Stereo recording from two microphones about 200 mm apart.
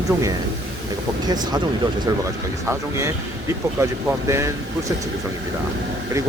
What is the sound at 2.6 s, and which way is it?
Speech, 15° right (ahead or behind).